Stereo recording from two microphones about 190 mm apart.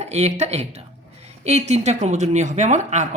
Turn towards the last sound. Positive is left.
turn(degrees=-40)  # may be behind; listen again after turning